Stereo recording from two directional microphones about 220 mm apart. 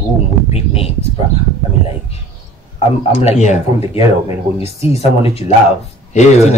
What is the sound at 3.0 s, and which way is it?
Speech, 30° left (ahead or behind).